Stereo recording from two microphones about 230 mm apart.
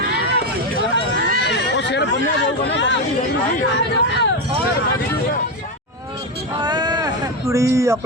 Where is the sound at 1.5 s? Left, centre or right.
Left.